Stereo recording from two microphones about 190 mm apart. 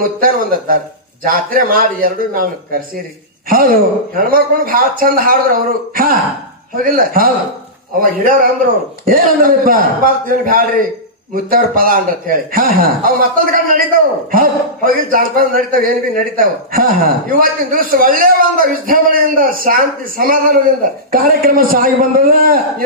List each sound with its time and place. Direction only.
0.0 s a man's voice: 50° right (ahead or behind)
9.0 s a man's voice: 50° right (ahead or behind)